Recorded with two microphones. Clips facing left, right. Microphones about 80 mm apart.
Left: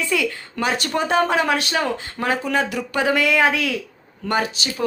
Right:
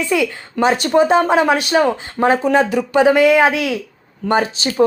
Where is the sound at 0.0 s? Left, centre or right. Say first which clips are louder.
Right 5 dB; centre.